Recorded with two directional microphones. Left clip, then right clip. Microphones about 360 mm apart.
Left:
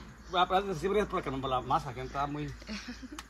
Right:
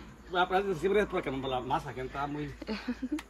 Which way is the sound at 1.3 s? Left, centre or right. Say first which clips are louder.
Left 2 dB; left.